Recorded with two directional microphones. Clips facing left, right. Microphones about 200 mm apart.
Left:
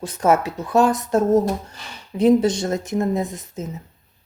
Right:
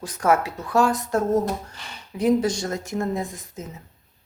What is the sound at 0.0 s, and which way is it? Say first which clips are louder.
Speech: left 3 dB; 25° left (ahead or behind).